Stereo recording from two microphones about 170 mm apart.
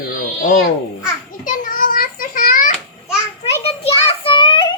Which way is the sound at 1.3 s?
55° left (ahead or behind).